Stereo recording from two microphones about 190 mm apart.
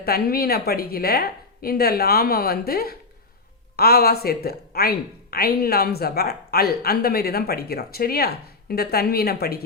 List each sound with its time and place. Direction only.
0.0 s speech: 55° left (ahead or behind)